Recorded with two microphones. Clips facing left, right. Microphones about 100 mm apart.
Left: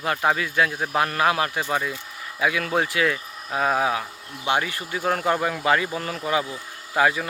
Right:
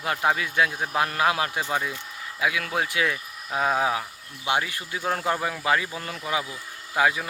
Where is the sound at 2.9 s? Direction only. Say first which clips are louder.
Left 3 dB; 15° right (ahead or behind).